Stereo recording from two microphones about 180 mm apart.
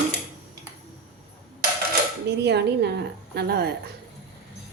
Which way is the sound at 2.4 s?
65° right (ahead or behind).